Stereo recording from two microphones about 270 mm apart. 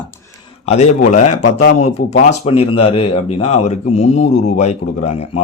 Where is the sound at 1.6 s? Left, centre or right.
Left.